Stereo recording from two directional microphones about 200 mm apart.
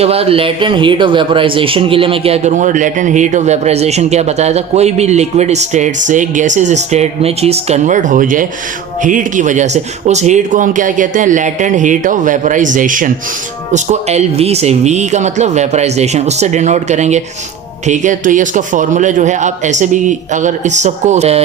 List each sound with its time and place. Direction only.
0.0 s speech: 30° right (ahead or behind)